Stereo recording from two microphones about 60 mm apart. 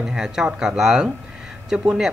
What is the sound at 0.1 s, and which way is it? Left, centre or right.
Speech, centre.